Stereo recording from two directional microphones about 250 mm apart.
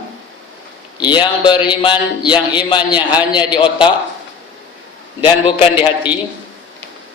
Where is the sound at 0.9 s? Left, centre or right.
Centre.